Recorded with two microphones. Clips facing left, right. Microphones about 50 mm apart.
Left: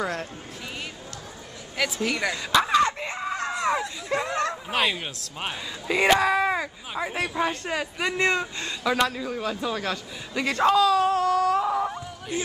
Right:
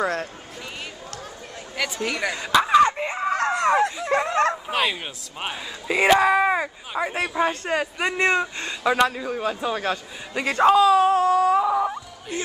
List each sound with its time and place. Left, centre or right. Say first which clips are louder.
1.8 s a man's voice: even; centre
2.5 s a sound: right 4 dB; centre
3.3 s speech: right 6 dB; right
4.6 s speech: right 1 dB; centre
7.1 s a man's voice: right 3 dB; centre
8.3 s speech: right 3 dB; right
9.8 s wail: right 4 dB; centre